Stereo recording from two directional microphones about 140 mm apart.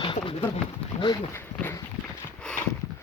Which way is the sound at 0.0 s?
40° left (ahead or behind).